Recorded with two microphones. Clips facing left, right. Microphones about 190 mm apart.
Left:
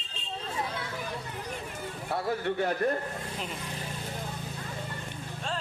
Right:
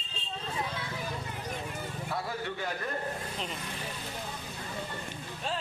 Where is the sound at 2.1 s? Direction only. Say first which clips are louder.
Left 7 dB; 55° left (ahead or behind).